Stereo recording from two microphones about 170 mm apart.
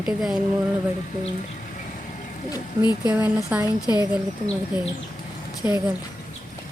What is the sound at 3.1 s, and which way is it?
Speech, 5° right (ahead or behind).